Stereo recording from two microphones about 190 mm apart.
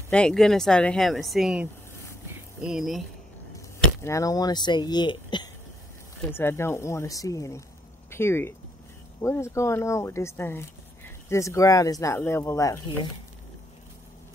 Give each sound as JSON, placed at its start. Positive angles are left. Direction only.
{"t": 0.1, "sound": "speech", "side_deg": 5}
{"t": 3.5, "sound": "speech", "side_deg": 15}
{"t": 6.3, "sound": "speech", "side_deg": 10}